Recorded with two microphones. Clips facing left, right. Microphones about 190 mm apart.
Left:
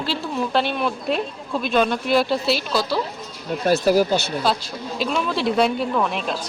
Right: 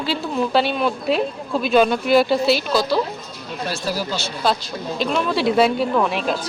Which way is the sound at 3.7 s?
55° left (ahead or behind).